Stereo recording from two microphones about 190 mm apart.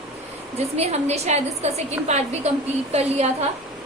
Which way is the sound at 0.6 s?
35° right (ahead or behind).